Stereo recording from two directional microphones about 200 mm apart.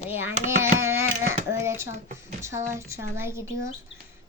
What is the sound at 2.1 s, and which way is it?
Speech, 35° right (ahead or behind).